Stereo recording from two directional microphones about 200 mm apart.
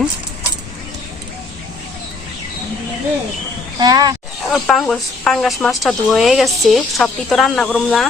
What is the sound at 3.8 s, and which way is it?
Speech, 20° right (ahead or behind).